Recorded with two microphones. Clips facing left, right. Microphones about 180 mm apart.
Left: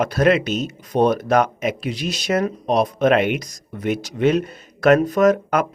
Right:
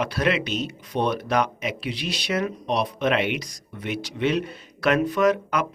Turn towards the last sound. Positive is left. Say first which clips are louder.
# left 5 dB
turn(degrees=45)  # may be behind; listen again after turning